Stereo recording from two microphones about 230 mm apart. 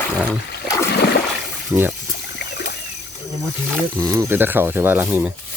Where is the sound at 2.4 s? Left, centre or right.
Left.